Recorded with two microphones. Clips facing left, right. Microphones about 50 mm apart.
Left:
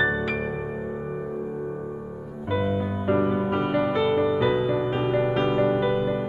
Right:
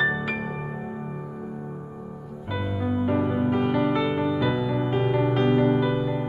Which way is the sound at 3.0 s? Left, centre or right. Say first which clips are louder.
Left 1 dB; centre.